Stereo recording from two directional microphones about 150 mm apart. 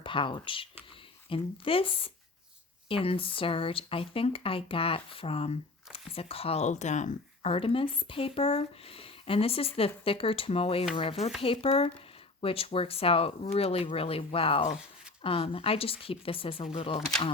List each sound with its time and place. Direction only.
0.0 s speech: 35° left (ahead or behind); by 7.5 s 50° left (ahead or behind)
7.5 s speech: 35° left (ahead or behind)